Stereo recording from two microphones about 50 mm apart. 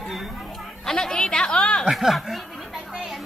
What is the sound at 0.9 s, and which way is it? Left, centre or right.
A woman's voice, centre.